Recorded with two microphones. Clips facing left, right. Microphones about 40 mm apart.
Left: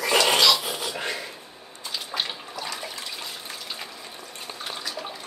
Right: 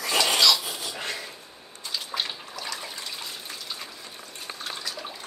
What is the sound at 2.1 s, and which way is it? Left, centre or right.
Water, centre.